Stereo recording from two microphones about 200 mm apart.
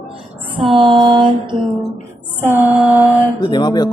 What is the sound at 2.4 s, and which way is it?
Music, 10° right (ahead or behind).